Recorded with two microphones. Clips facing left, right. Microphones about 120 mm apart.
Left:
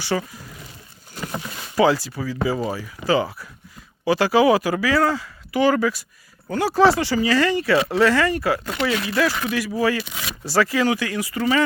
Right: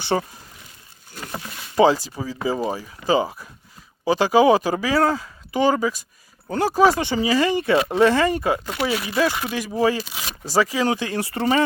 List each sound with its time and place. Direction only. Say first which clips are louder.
0.1 s speech: right 2 dB; 30° right (ahead or behind)
1.7 s speech: right 1 dB; 20° right (ahead or behind)
8.6 s speech: left 1 dB; 10° right (ahead or behind)
9.0 s speech: even; 20° right (ahead or behind)